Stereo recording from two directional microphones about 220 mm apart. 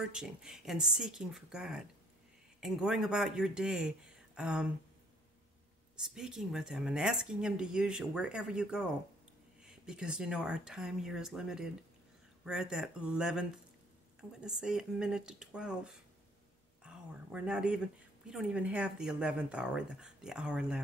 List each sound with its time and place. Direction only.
0.1 s speech: 5° right (ahead or behind)
5.9 s speech: centre (ahead or behind)
16.8 s a sound: 5° right (ahead or behind)
18.3 s speech: 5° right (ahead or behind)